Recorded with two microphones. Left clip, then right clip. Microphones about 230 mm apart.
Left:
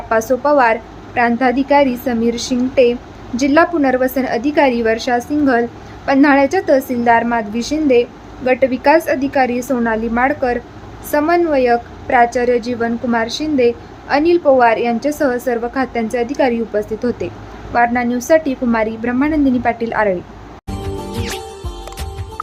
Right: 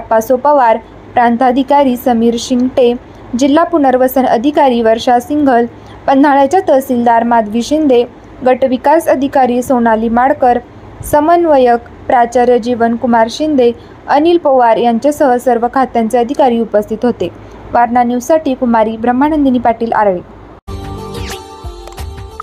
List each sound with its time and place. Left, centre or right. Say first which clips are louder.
0.1 s a woman's voice: right 5 dB; centre
21.1 s music: right 2 dB; centre